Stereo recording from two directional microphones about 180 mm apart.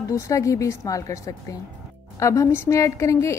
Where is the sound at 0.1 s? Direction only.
15° left (ahead or behind).